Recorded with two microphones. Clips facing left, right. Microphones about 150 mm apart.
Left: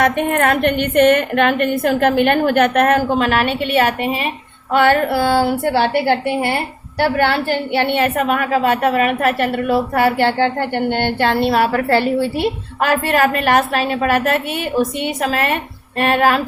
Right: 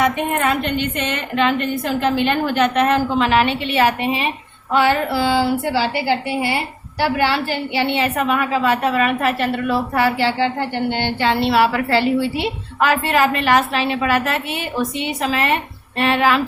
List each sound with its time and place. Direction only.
0.0 s a woman's voice: 55° left (ahead or behind)